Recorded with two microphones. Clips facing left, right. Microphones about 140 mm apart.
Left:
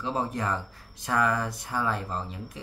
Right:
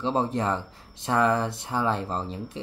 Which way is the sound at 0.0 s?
25° right (ahead or behind).